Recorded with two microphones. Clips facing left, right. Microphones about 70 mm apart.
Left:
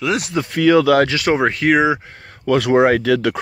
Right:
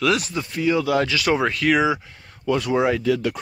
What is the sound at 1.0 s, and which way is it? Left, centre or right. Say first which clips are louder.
Speech: left 5 dB; left.